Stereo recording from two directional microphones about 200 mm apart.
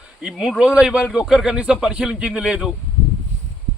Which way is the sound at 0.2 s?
5° right (ahead or behind).